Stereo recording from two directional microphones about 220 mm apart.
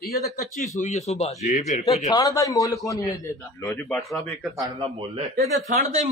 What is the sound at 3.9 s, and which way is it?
Speech, centre (ahead or behind).